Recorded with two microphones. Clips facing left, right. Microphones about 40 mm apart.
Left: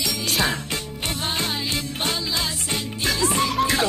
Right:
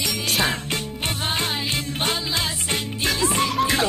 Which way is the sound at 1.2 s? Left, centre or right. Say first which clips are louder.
Right 1 dB; right.